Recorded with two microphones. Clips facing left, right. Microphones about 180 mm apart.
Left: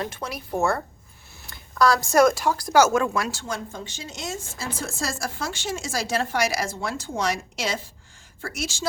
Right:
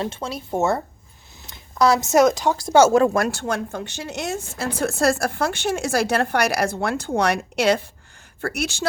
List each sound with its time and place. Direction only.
0.0 s speech: 25° right (ahead or behind)
3.2 s speech: 55° right (ahead or behind)